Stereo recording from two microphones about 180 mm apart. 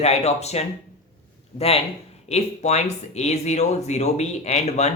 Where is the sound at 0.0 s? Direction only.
35° left (ahead or behind).